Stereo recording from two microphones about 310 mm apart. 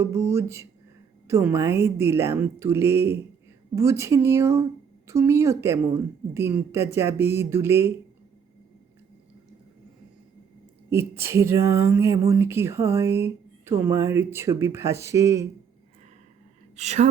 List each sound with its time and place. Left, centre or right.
0.0 s speech: centre
10.8 s speech: centre
16.7 s a woman's voice: right